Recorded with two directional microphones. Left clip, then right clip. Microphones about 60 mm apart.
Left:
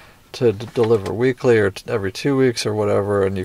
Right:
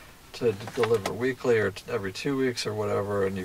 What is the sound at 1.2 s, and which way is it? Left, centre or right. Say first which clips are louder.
Speech: left 9 dB; left.